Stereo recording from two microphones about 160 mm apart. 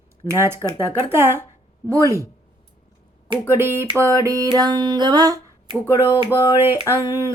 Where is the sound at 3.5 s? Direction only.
15° right (ahead or behind).